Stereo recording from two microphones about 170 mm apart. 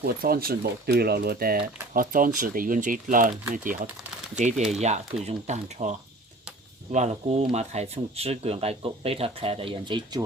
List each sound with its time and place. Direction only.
0.0 s speech: 60° right (ahead or behind); by 10.2 s 25° right (ahead or behind)